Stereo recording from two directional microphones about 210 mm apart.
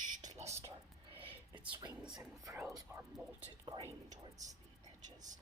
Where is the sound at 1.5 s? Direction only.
20° right (ahead or behind).